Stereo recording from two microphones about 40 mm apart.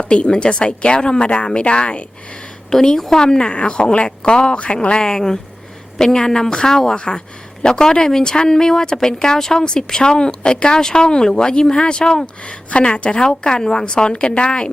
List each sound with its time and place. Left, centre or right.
0.0 s speech: left
2.6 s a woman's voice: centre